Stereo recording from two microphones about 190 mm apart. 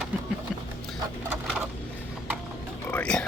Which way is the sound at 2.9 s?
5° left (ahead or behind).